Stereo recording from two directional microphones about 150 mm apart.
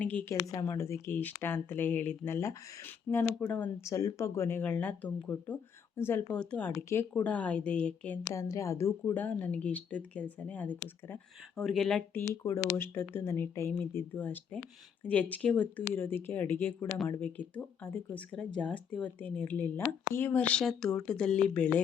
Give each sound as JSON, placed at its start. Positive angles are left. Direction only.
{"t": 0.0, "sound": "speech", "side_deg": 10}
{"t": 0.3, "sound": "speech", "side_deg": 25}
{"t": 8.3, "sound": "speech", "side_deg": 20}
{"t": 12.1, "sound": "speech", "side_deg": 15}